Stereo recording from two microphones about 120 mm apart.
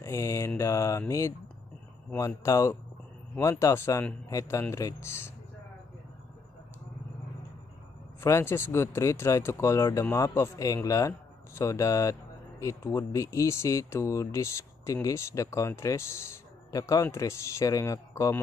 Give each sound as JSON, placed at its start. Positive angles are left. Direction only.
{"t": 0.0, "sound": "mantra", "side_deg": 25}
{"t": 0.6, "sound": "speech", "side_deg": 25}
{"t": 8.2, "sound": "speech", "side_deg": 20}